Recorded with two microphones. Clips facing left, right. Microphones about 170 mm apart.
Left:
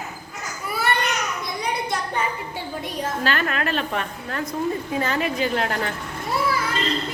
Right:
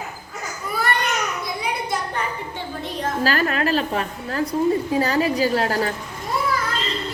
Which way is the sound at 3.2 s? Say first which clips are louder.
Right 4 dB; 35° right (ahead or behind).